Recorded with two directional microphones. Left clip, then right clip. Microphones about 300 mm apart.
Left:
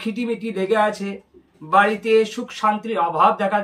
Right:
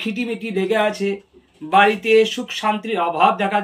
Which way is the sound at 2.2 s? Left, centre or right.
Centre.